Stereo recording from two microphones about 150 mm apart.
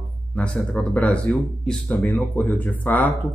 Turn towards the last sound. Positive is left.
turn(degrees=10)  # may be behind; listen again after turning